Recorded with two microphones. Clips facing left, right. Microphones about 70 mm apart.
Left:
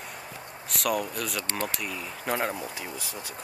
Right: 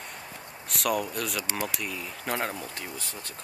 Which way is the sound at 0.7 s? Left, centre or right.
Centre.